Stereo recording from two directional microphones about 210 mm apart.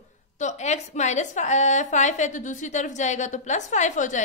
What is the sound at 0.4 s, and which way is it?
A woman's voice, 35° left (ahead or behind).